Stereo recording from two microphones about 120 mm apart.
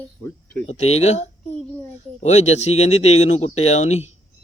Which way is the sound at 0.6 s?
60° left (ahead or behind).